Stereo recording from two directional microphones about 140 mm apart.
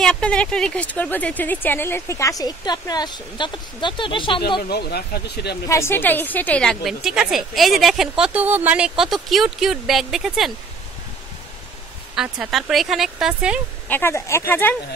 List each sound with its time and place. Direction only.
0.0 s speech: 5° left (ahead or behind); by 4.6 s 35° left (ahead or behind)
5.7 s a woman's voice: 15° left (ahead or behind); by 10.5 s centre (ahead or behind)
12.2 s a woman's voice: centre (ahead or behind)
13.8 s speech: 15° left (ahead or behind)